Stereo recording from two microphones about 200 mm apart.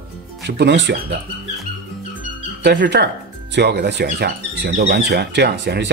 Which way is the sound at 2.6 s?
55° right (ahead or behind).